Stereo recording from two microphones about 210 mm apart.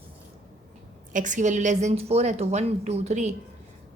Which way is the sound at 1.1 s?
35° right (ahead or behind).